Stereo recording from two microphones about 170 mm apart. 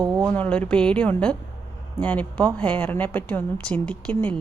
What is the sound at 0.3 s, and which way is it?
A woman's voice, 10° left (ahead or behind).